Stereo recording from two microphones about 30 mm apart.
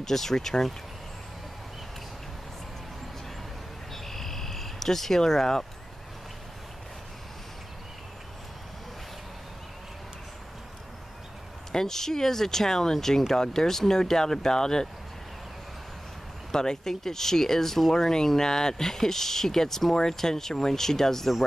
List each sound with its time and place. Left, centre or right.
0.0 s speech: centre
3.9 s a sound: centre
11.7 s speech: centre
16.5 s speech: centre